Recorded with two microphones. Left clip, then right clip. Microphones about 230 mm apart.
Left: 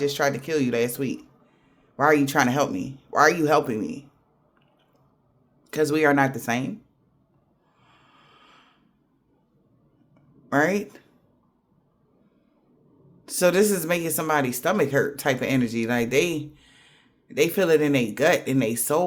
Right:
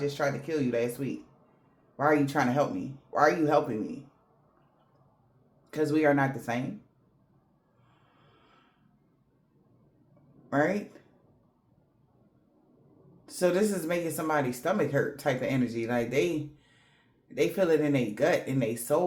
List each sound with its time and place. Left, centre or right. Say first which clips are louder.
0.0 s speech: left 6 dB; left
5.7 s speech: left 5 dB; left
8.4 s a sound: left 9 dB; left
10.5 s speech: left 5 dB; left
13.2 s speech: left 7 dB; left